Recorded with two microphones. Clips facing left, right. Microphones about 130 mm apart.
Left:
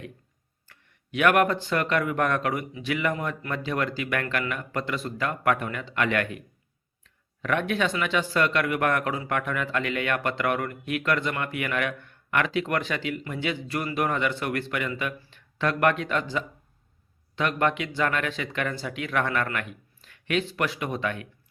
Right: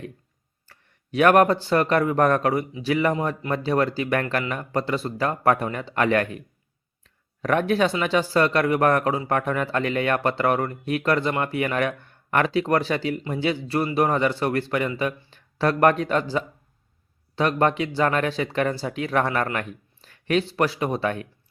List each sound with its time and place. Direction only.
0.7 s speech: 35° right (ahead or behind)